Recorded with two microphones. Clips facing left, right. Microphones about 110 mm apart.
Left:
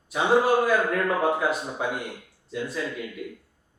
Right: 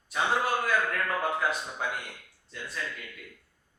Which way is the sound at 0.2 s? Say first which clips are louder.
Left 7 dB; 25° left (ahead or behind).